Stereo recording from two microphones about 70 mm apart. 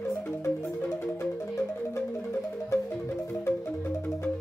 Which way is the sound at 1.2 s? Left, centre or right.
Left.